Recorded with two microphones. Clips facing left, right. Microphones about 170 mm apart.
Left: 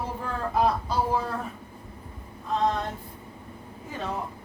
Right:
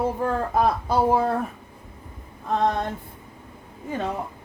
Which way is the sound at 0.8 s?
55° right (ahead or behind).